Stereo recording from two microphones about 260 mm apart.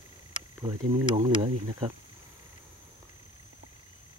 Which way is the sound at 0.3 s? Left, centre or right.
Centre.